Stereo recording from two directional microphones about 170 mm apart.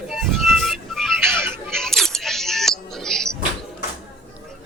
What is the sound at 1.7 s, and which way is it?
Music, 5° left (ahead or behind).